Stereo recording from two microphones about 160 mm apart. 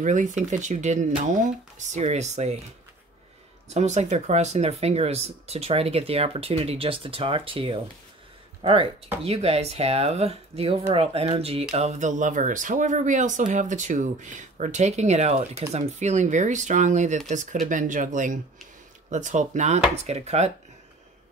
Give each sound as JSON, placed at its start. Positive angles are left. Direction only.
{"t": 0.0, "sound": "speech", "side_deg": -50}
{"t": 3.6, "sound": "speech", "side_deg": -45}